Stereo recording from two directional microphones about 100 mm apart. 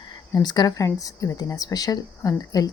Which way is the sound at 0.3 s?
45° left (ahead or behind).